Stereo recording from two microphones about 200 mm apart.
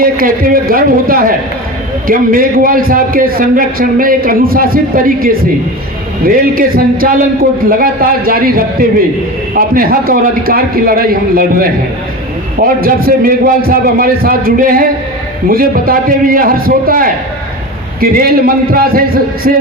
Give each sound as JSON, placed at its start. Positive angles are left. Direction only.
{"t": 0.0, "sound": "a man's voice", "side_deg": -45}